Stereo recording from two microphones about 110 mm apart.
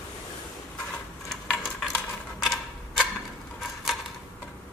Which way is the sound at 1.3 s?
5° left (ahead or behind).